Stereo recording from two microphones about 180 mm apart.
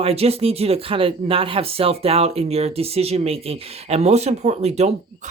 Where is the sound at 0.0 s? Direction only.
35° right (ahead or behind).